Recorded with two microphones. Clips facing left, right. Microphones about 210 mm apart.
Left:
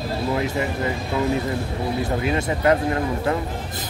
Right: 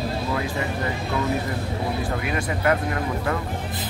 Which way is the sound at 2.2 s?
25° left (ahead or behind).